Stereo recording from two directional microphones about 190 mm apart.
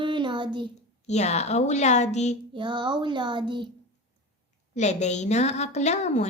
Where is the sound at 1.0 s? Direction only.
35° left (ahead or behind).